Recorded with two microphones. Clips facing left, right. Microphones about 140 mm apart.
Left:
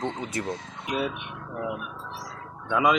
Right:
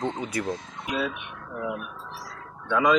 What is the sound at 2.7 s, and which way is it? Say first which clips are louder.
Speech: even; 15° left (ahead or behind).